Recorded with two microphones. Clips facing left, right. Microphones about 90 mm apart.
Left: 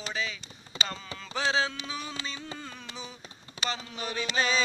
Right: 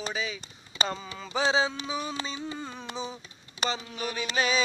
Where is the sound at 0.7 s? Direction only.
35° left (ahead or behind).